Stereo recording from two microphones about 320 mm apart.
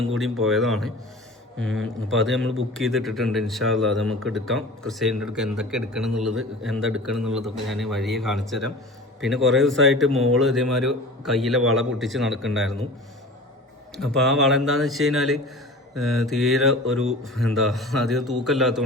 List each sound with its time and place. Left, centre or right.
0.2 s speech: centre
1.5 s speech: right
2.2 s speech: centre
13.9 s speech: centre